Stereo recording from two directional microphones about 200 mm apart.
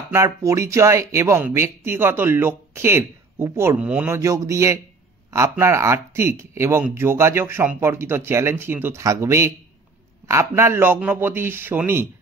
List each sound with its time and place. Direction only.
0.1 s speech: 15° right (ahead or behind)